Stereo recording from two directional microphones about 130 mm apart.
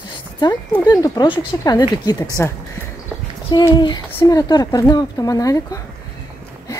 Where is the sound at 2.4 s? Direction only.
20° left (ahead or behind).